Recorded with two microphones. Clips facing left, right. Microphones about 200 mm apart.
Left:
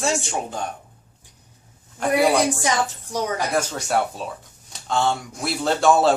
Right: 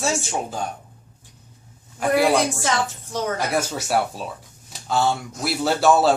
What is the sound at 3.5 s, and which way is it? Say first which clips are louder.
Speech: even; 5° right (ahead or behind).